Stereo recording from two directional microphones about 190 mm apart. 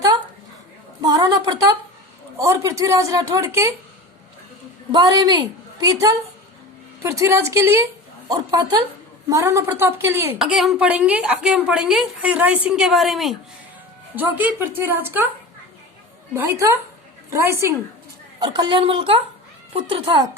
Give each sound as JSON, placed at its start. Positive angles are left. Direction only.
{"t": 1.0, "sound": "a woman's voice", "side_deg": -20}
{"t": 4.9, "sound": "a woman's voice", "side_deg": -20}
{"t": 10.3, "sound": "a woman's voice", "side_deg": 0}
{"t": 16.3, "sound": "a woman's voice", "side_deg": -15}